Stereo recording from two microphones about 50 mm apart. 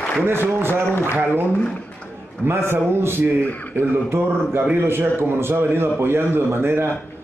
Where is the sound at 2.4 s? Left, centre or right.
Right.